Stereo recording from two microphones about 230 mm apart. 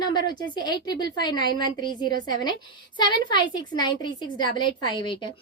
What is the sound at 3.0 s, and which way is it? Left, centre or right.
A woman's voice, centre.